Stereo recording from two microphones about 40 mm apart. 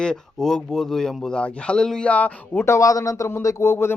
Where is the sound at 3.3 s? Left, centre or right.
Left.